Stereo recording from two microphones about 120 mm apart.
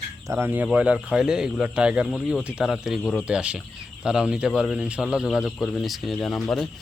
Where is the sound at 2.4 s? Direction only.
5° right (ahead or behind).